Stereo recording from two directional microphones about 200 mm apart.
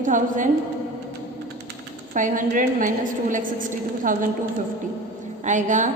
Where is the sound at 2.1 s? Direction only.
40° right (ahead or behind).